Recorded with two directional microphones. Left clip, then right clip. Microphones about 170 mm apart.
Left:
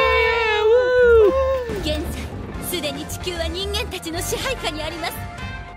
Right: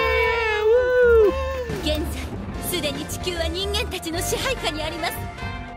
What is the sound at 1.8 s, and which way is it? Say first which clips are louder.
Music: even; centre (ahead or behind).